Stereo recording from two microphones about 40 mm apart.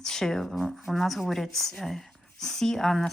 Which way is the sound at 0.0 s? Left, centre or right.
Centre.